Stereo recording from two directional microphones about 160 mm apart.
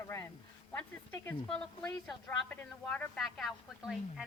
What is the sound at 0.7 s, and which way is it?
A woman's voice, 15° left (ahead or behind).